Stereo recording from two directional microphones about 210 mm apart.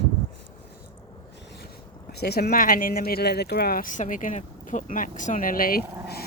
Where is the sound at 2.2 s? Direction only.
50° left (ahead or behind).